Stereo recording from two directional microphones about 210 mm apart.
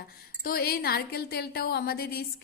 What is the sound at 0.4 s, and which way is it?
A woman's voice, 45° left (ahead or behind).